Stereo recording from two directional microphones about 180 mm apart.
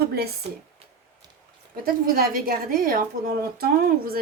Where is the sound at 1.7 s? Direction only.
55° right (ahead or behind).